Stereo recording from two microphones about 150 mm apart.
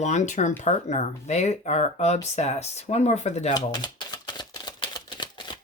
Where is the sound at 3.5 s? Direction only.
25° left (ahead or behind).